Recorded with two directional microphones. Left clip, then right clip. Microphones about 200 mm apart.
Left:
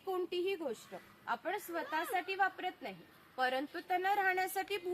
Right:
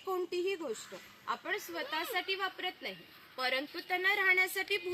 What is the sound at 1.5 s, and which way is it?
A woman's voice, 45° left (ahead or behind).